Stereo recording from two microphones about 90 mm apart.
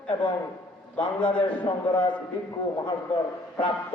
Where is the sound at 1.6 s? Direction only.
60° left (ahead or behind).